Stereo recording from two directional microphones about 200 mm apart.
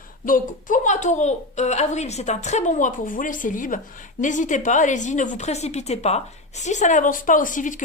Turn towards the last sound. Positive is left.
turn(degrees=40)  # may be behind; listen again after turning